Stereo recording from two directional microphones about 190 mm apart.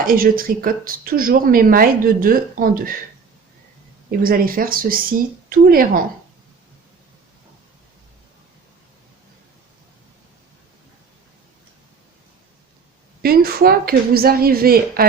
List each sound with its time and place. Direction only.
0.0 s speech: 50° right (ahead or behind)
4.2 s speech: 50° right (ahead or behind)
13.2 s speech: 50° right (ahead or behind)